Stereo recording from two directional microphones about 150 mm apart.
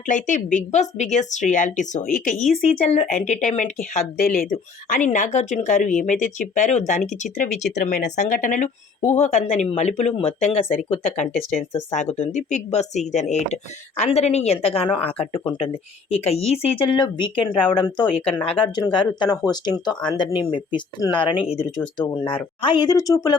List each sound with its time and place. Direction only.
0.1 s a woman's voice: 55° left (ahead or behind)
2.6 s a woman's voice: 45° left (ahead or behind)
16.9 s speech: 30° left (ahead or behind)
22.1 s speech: 15° left (ahead or behind)
22.6 s a woman's voice: 30° left (ahead or behind)